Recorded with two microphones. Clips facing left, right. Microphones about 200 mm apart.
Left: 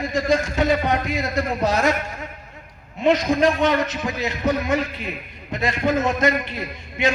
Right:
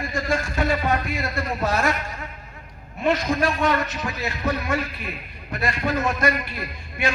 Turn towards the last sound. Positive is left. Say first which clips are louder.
# left 4 dB
turn(degrees=20)  # may be behind; listen again after turning